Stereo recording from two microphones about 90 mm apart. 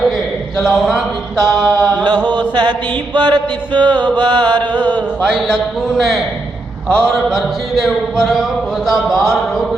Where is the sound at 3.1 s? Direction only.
55° right (ahead or behind).